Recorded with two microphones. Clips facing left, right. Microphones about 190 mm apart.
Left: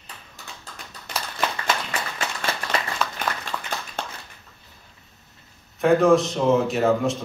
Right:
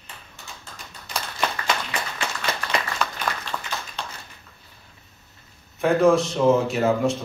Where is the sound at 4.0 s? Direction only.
50° left (ahead or behind).